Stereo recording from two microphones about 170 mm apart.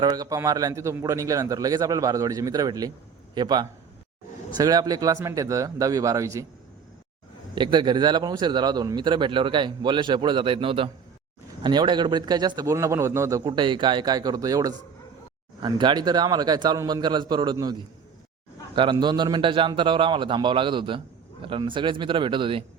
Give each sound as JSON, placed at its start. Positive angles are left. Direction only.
{"t": 0.0, "sound": "a man's voice", "side_deg": -20}
{"t": 7.5, "sound": "a man's voice", "side_deg": -25}